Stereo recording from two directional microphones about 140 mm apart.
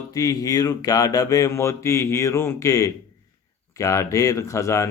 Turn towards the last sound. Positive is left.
turn(degrees=20)  # may be behind; listen again after turning